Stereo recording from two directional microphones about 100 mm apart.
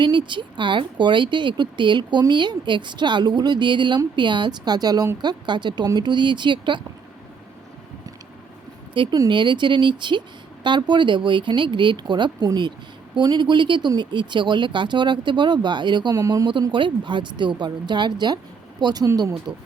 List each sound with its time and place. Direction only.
0.0 s speech: 50° right (ahead or behind)
8.9 s speech: 60° right (ahead or behind)
16.1 s speech: 35° right (ahead or behind)
16.5 s speech: 55° right (ahead or behind); by 19.3 s 40° right (ahead or behind)